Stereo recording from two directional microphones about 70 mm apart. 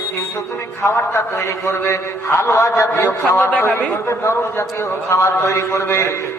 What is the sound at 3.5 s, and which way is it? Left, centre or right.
A man's voice, left.